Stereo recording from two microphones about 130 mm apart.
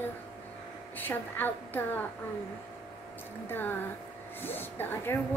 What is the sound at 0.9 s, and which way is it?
Speech, 15° left (ahead or behind).